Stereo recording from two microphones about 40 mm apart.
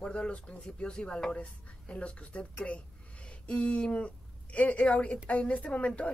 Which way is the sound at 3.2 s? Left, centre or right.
Left.